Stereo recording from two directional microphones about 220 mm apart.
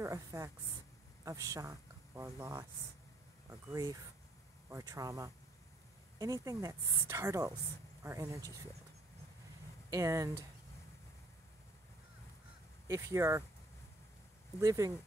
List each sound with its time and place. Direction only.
0.0 s a woman's voice: 15° right (ahead or behind)
9.8 s a woman's voice: 15° right (ahead or behind)
12.8 s a woman's voice: 15° right (ahead or behind)
14.6 s a woman's voice: 15° right (ahead or behind)